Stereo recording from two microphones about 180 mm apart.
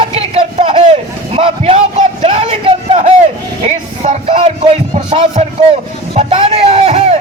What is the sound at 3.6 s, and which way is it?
Music, 40° right (ahead or behind).